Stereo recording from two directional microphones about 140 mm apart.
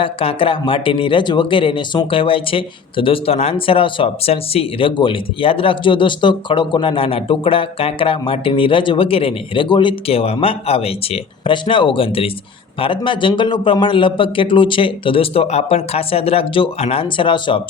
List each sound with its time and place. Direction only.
0.0 s speech: 40° left (ahead or behind)